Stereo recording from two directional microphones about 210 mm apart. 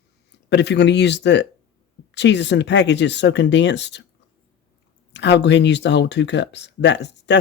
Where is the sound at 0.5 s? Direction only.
55° left (ahead or behind).